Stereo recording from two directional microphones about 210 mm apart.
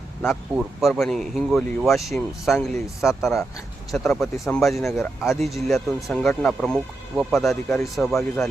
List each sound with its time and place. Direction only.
0.2 s speech: centre (ahead or behind)